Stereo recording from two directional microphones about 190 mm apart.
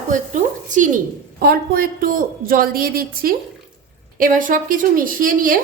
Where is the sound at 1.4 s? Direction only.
50° right (ahead or behind).